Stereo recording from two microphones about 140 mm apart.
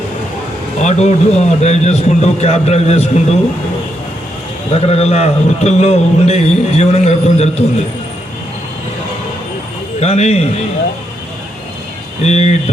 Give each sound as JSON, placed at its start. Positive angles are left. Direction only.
{"t": 0.8, "sound": "a man's voice", "side_deg": 55}
{"t": 4.7, "sound": "a man's voice", "side_deg": 50}
{"t": 10.0, "sound": "a man's voice", "side_deg": 50}
{"t": 12.2, "sound": "a man's voice", "side_deg": 50}